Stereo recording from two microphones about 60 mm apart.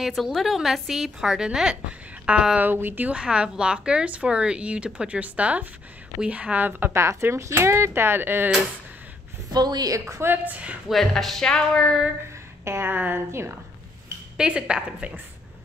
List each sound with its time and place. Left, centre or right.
0.0 s a woman's voice: centre
2.6 s speech: right
3.2 s speech: centre; by 8.5 s right
9.6 s a woman's voice: right
10.0 s a woman's voice: right
10.3 s speech: right
10.9 s speech: centre
12.6 s speech: right
12.9 s speech: right
14.3 s a woman's voice: centre